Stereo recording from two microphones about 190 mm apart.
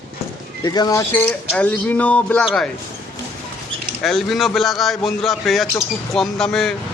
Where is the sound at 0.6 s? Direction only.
20° left (ahead or behind); by 2.7 s 5° left (ahead or behind).